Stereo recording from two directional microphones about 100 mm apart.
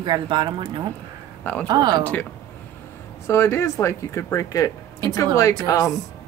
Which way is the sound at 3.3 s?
25° left (ahead or behind).